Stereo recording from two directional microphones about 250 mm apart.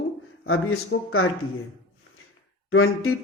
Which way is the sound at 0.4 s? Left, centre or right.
Left.